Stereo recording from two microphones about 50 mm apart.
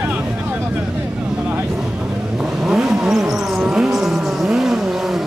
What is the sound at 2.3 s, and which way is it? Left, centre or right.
Vehicle, centre.